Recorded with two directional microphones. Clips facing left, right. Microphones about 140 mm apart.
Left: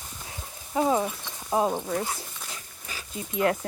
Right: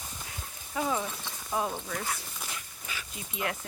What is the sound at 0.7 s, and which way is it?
Speech, 30° left (ahead or behind).